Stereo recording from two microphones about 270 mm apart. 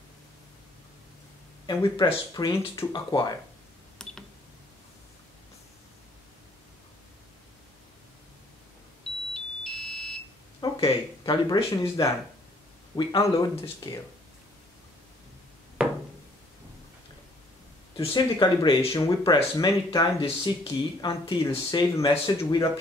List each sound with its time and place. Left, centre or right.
1.7 s speech: centre
4.0 s cash register: centre
9.3 s music: centre
10.6 s a sound: centre
12.9 s speech: centre
15.8 s a sound: centre
17.9 s speech: centre